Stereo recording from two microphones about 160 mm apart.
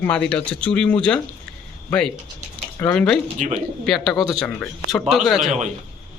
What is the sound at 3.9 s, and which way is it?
Speech, centre (ahead or behind).